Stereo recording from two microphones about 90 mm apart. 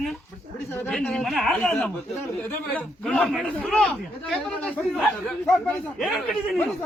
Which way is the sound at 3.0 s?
5° left (ahead or behind).